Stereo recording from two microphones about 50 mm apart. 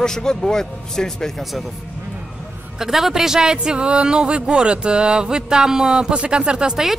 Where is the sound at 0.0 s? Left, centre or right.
Centre.